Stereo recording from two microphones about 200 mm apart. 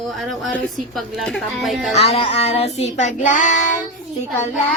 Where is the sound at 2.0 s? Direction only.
30° left (ahead or behind).